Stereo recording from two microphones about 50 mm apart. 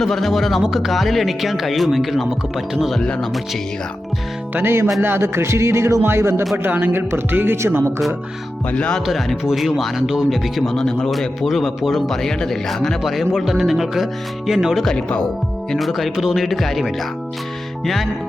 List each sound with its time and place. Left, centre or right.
0.0 s speech: centre
4.6 s music: right
6.7 s speech: right
8.7 s speech: left
9.0 s speech: centre
10.7 s speech: centre
13.0 s speech: centre